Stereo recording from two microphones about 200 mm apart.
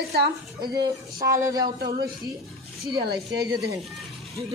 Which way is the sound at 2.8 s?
55° right (ahead or behind).